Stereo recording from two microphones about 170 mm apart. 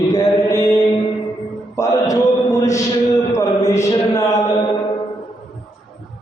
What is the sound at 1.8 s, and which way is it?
Music, 20° left (ahead or behind).